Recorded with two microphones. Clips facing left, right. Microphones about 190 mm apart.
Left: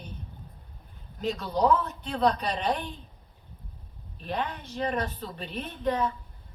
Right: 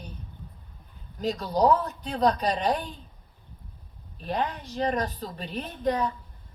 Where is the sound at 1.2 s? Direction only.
40° right (ahead or behind).